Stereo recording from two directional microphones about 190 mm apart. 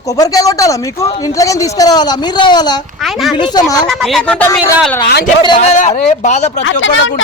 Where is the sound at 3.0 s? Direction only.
Centre (ahead or behind).